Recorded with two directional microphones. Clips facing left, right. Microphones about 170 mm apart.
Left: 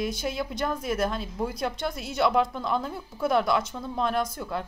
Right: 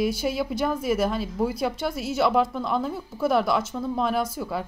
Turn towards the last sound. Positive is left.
turn(degrees=-5)  # may be behind; listen again after turning